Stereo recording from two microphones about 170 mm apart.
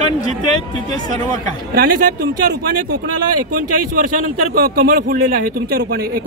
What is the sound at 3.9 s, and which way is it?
Speech, 55° right (ahead or behind).